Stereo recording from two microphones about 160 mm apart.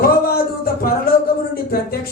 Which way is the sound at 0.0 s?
70° left (ahead or behind).